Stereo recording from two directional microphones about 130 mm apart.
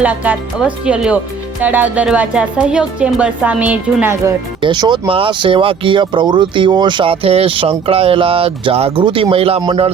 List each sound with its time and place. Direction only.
0.0 s a woman's voice: 10° right (ahead or behind)
4.6 s speech: 35° right (ahead or behind)
9.6 s speech: 35° right (ahead or behind)